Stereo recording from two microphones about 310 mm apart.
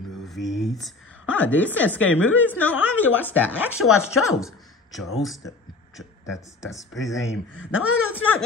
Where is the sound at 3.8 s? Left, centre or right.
Left.